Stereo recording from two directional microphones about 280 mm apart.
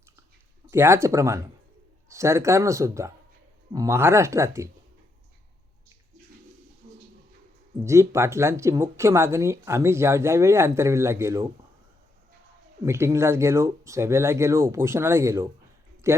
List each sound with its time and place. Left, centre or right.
0.7 s speech: centre
6.8 s a sound: right
7.9 s speech: centre
12.8 s speech: centre